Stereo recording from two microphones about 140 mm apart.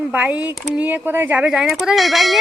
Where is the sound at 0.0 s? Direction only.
10° right (ahead or behind).